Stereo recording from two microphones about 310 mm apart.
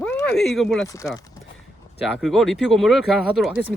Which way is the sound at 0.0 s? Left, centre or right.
Centre.